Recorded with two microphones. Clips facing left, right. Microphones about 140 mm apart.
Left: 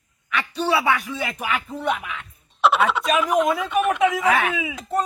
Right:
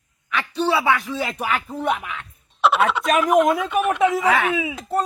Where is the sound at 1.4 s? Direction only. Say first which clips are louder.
Right 2 dB; 40° right (ahead or behind).